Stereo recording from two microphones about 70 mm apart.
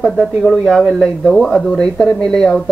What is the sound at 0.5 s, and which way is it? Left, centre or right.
Speech, centre.